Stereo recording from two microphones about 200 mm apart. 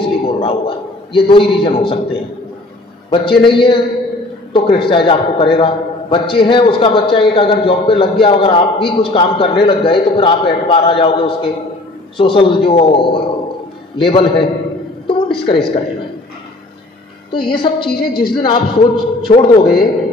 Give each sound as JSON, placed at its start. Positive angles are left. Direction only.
{"t": 0.0, "sound": "a man's voice", "side_deg": 25}
{"t": 3.1, "sound": "a man's voice", "side_deg": 25}
{"t": 17.3, "sound": "a man's voice", "side_deg": 25}